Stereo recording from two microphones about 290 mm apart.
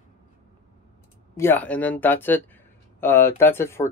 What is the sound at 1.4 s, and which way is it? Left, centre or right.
Speech, centre.